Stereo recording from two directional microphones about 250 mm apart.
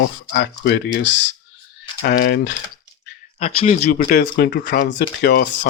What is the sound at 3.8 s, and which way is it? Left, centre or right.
Speech, left.